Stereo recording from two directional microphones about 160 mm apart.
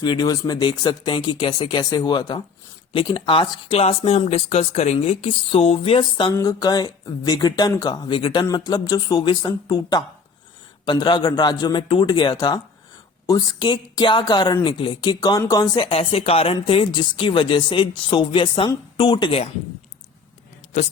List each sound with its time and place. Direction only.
0.0 s speech: 25° left (ahead or behind)
6.3 s speech: 20° left (ahead or behind)